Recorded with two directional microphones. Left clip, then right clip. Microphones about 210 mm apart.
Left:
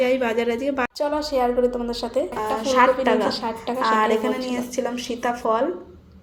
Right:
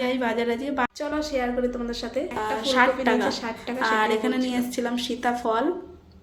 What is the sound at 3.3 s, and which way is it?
Speech, 10° left (ahead or behind).